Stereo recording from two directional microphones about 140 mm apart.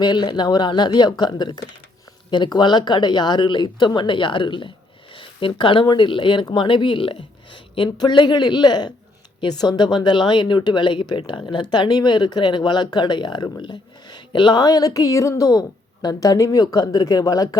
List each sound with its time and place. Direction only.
0.0 s speech: 30° left (ahead or behind)